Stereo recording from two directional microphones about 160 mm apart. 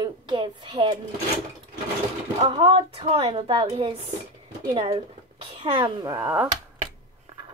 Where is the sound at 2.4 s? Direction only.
35° right (ahead or behind).